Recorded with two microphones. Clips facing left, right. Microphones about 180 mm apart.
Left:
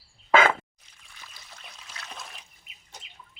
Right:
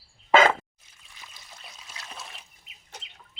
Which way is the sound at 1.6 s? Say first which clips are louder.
Left 1 dB; 5° right (ahead or behind).